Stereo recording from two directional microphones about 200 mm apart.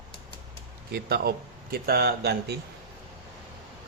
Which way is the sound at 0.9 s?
55° right (ahead or behind).